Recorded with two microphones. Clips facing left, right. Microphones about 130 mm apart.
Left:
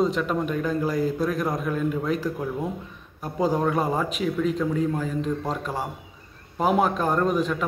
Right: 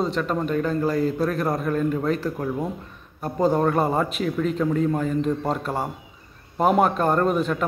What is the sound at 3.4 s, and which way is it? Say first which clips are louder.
Speech: right 3 dB; 5° left (ahead or behind).